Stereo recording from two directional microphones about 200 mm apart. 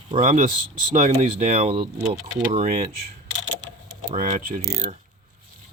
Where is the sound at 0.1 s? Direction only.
40° right (ahead or behind).